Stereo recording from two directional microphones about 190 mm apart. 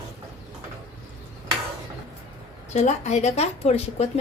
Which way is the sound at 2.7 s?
35° left (ahead or behind).